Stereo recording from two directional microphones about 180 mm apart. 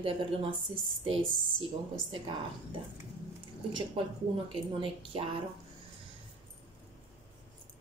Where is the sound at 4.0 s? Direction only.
30° right (ahead or behind).